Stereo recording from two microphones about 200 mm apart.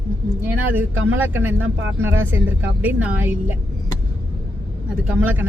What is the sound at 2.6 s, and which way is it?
Speech, 5° right (ahead or behind).